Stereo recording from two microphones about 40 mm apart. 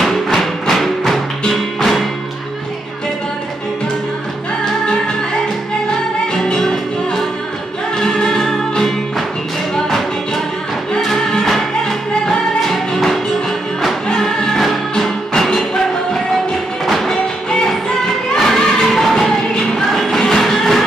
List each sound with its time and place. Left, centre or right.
0.0 s music: centre
6.3 s music: centre
12.7 s music: centre
16.8 s music: centre
18.3 s music: centre